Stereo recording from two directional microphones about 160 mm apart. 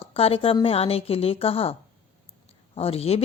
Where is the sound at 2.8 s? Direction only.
35° left (ahead or behind).